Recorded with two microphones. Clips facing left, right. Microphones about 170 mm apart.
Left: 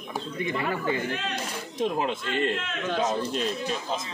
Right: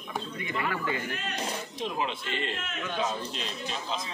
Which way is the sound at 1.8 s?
50° left (ahead or behind).